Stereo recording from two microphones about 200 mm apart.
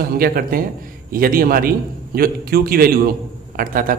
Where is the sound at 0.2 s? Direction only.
45° right (ahead or behind).